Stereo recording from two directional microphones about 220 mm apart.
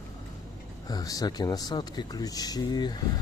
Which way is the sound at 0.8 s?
15° left (ahead or behind).